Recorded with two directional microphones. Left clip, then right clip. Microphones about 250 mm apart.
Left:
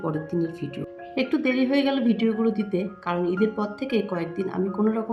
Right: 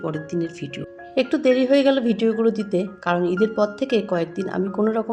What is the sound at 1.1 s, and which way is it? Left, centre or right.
Speech, right.